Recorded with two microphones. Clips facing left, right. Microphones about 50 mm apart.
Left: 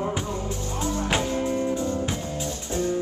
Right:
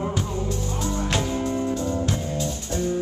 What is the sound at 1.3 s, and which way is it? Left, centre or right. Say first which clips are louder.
Music: even; centre.